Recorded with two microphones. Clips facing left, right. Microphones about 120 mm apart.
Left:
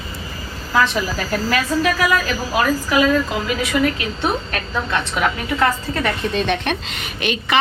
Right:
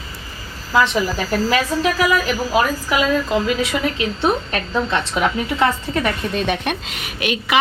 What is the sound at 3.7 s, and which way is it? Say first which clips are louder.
A woman's voice: left 2 dB; 20° right (ahead or behind).